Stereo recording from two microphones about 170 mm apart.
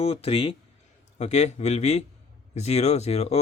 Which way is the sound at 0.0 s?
35° left (ahead or behind).